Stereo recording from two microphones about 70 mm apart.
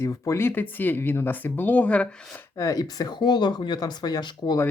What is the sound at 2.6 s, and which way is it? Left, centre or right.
Speech, left.